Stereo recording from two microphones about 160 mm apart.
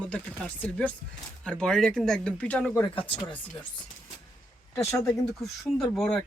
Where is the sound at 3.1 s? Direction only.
30° left (ahead or behind).